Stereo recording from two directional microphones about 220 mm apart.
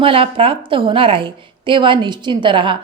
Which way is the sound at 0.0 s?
25° right (ahead or behind).